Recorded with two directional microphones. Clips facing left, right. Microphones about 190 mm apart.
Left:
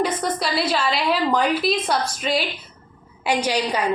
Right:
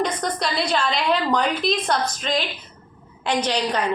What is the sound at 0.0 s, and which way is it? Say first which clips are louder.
A woman's voice: left 1 dB; 5° left (ahead or behind).